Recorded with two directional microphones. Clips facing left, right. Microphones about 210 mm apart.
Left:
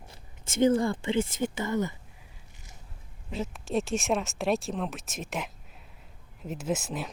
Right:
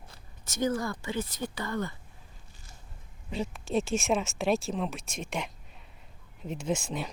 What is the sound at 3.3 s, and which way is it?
Speech, centre (ahead or behind).